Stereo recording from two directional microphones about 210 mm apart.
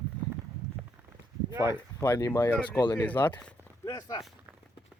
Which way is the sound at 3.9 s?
20° left (ahead or behind).